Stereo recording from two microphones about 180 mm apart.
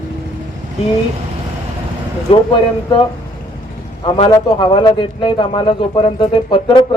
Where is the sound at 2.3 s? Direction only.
30° left (ahead or behind).